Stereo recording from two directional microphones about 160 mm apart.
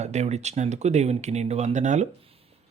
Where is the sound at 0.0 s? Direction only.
45° right (ahead or behind).